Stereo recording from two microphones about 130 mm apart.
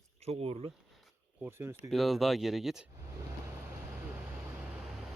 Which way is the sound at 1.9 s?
Centre (ahead or behind).